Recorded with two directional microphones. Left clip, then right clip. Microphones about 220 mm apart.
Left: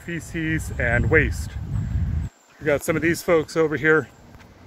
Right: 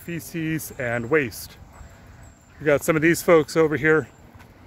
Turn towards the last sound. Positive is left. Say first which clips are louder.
# even
turn(degrees=-25)  # may be behind; listen again after turning